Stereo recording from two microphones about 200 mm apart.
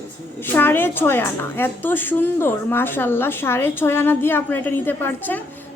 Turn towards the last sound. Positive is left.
turn(degrees=10)  # may be behind; listen again after turning